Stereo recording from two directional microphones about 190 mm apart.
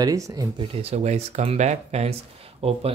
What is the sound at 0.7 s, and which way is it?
Speech, 35° right (ahead or behind).